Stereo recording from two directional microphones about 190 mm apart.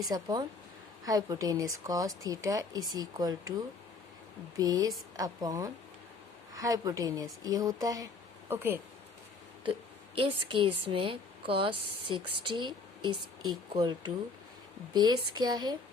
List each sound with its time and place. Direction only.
0.1 s speech: 20° right (ahead or behind)
4.5 s a woman's voice: 20° right (ahead or behind)
10.2 s speech: 25° right (ahead or behind)